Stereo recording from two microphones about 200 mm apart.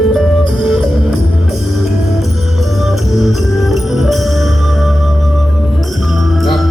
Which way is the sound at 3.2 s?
Centre (ahead or behind).